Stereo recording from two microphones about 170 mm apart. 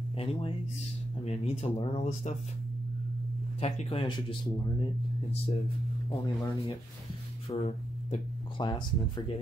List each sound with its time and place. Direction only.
0.2 s speech: 35° left (ahead or behind)
3.6 s speech: 35° left (ahead or behind)
6.2 s speech: 25° left (ahead or behind)
7.4 s speech: 35° left (ahead or behind)
8.6 s speech: 25° left (ahead or behind)